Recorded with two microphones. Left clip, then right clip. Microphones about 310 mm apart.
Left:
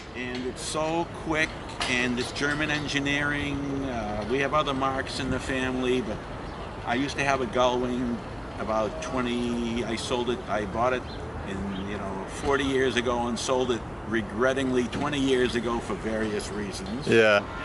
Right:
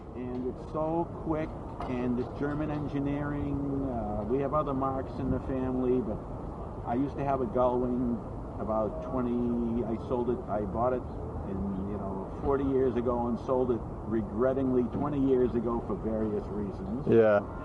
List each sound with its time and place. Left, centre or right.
0.2 s speech: centre
8.6 s speech: centre
12.5 s speech: centre
13.1 s speech: right
13.7 s speech: centre